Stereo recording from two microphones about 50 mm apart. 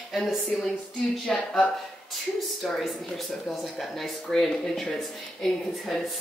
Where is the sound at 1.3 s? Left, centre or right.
Centre.